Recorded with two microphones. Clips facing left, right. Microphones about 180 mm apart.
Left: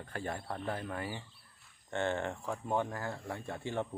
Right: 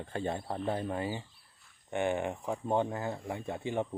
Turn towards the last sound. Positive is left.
turn(degrees=-15)  # may be behind; listen again after turning